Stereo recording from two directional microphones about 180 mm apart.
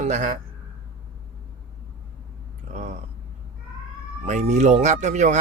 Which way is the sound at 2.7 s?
40° right (ahead or behind).